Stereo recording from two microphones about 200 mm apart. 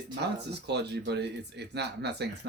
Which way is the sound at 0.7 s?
55° right (ahead or behind).